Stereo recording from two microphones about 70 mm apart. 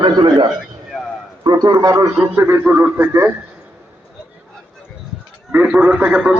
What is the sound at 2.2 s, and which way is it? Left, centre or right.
Speech, right.